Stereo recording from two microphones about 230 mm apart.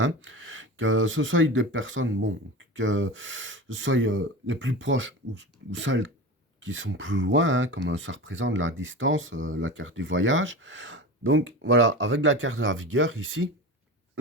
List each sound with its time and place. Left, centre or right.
0.0 s speech: right